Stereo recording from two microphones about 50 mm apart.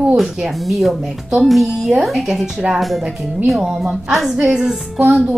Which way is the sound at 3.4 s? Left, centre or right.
Centre.